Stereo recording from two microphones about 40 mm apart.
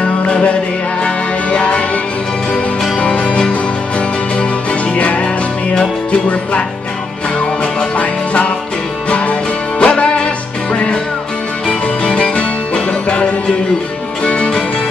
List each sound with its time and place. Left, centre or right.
1.0 s music: left
3.0 s music: left
4.9 s music: left
8.0 s music: left